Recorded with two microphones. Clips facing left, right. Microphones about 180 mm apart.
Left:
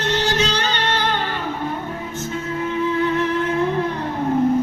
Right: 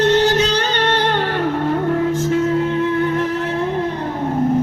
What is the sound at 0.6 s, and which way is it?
Music, 55° right (ahead or behind).